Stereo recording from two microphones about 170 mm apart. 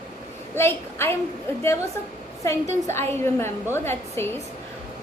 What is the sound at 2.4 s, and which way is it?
Speech, 15° left (ahead or behind).